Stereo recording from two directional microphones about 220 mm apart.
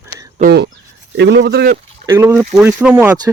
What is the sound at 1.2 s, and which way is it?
Speech, 50° right (ahead or behind).